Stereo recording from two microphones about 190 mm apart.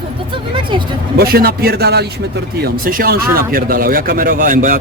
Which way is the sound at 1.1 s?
55° right (ahead or behind).